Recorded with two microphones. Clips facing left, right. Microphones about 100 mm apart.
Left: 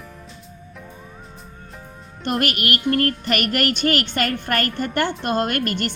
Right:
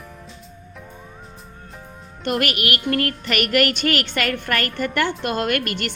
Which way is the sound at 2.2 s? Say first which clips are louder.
Even; 40° left (ahead or behind).